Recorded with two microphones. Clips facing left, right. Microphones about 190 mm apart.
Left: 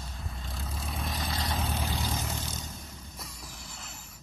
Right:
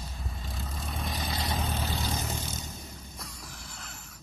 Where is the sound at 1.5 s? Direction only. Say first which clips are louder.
Even; 10° left (ahead or behind).